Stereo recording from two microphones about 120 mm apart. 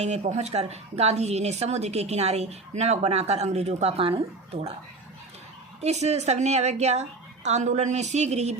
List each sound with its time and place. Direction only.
0.0 s speech: 65° right (ahead or behind)
5.8 s a woman's voice: 65° right (ahead or behind)